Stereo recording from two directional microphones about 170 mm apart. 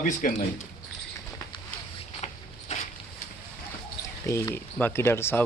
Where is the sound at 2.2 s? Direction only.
40° left (ahead or behind).